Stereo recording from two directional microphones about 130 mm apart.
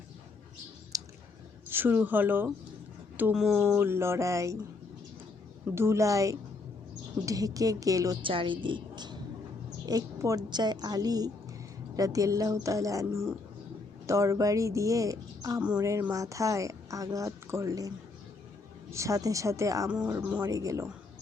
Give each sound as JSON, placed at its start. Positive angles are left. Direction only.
{"t": 0.9, "sound": "squish", "side_deg": -25}
{"t": 1.6, "sound": "speech", "side_deg": -15}
{"t": 3.8, "sound": "a woman's voice", "side_deg": -20}
{"t": 5.7, "sound": "a woman's voice", "side_deg": -20}
{"t": 8.2, "sound": "a woman's voice", "side_deg": -40}